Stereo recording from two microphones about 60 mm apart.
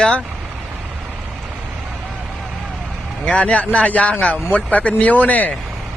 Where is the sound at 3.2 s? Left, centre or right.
Left.